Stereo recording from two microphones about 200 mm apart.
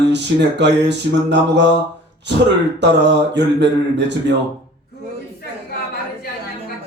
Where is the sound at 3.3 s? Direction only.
60° right (ahead or behind).